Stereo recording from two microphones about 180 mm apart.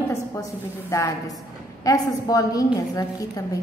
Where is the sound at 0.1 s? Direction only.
15° left (ahead or behind).